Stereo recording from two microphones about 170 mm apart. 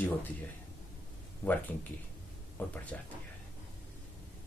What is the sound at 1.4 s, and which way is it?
Speech, 10° left (ahead or behind).